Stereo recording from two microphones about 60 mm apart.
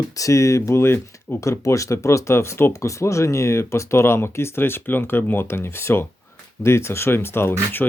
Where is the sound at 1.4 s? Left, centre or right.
Left.